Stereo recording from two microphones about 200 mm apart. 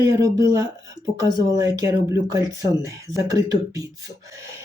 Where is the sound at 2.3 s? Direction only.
15° right (ahead or behind).